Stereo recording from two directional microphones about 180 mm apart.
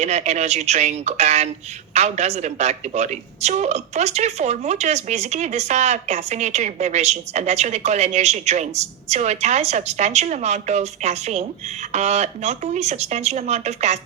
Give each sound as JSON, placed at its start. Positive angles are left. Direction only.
{"t": 0.0, "sound": "a woman's voice", "side_deg": -40}